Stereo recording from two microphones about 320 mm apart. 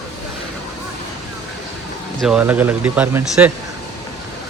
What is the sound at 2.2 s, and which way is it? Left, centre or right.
Speech, centre.